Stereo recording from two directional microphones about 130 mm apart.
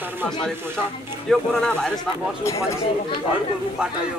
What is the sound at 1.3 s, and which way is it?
Speech, 5° left (ahead or behind).